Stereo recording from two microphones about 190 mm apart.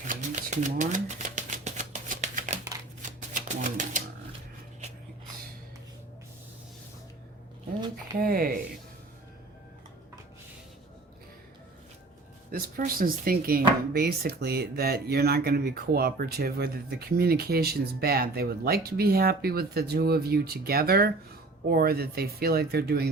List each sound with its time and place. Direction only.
0.1 s typewriter: 40° right (ahead or behind)
3.2 s music: 40° right (ahead or behind)
8.2 s a sound: 50° right (ahead or behind)
12.5 s speech: 50° right (ahead or behind)